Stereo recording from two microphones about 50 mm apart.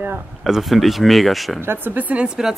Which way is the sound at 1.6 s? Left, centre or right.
Right.